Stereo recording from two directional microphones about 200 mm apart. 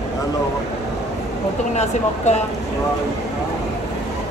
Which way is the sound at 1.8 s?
35° left (ahead or behind).